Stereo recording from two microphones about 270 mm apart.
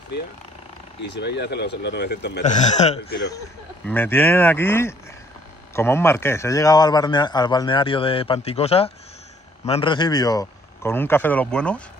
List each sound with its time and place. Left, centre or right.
1.0 s a man's voice: left
3.8 s a man's voice: centre